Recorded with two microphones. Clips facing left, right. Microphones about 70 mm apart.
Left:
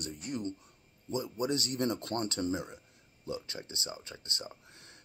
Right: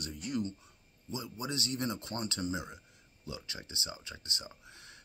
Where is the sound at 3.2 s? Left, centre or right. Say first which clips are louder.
Left 5 dB; left.